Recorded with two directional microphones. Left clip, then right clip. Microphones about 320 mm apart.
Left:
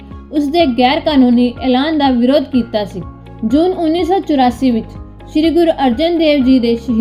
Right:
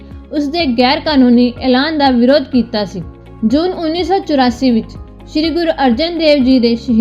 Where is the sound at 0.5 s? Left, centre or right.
Right.